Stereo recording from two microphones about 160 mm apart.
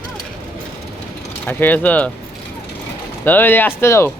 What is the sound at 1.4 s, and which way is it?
Speech, 10° left (ahead or behind).